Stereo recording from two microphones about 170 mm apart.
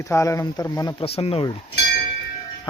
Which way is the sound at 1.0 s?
35° left (ahead or behind).